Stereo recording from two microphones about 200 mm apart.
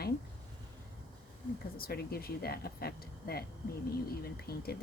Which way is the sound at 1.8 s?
50° left (ahead or behind).